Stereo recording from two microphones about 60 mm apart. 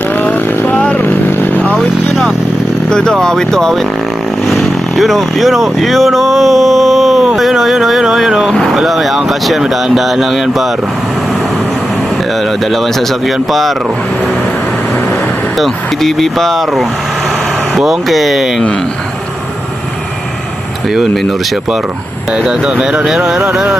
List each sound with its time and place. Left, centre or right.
0.2 s chainsaw: left
1.0 s vehicle: left
1.7 s vehicle: centre
2.9 s speech: centre
7.3 s vehicle: centre
8.7 s speech: centre
12.7 s speech: centre
15.5 s speech: centre
20.9 s speech: centre